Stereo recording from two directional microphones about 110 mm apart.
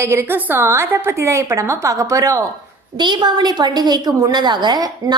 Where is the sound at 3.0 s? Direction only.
40° right (ahead or behind).